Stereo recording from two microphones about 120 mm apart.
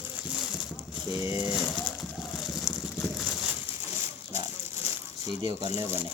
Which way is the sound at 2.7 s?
5° left (ahead or behind).